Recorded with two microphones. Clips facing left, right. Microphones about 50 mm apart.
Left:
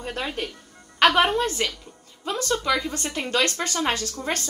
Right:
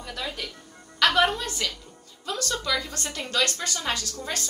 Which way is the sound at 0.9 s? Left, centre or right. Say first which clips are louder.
Left 3 dB; left.